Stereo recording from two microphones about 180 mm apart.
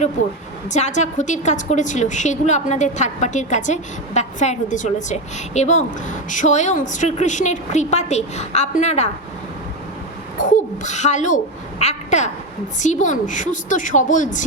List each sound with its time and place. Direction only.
0.7 s a woman's voice: 40° left (ahead or behind)
10.4 s a woman's voice: 45° left (ahead or behind)